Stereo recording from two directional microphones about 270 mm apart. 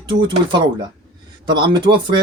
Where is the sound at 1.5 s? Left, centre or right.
Centre.